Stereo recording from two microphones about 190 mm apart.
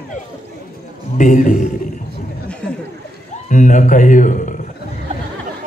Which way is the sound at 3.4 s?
40° left (ahead or behind).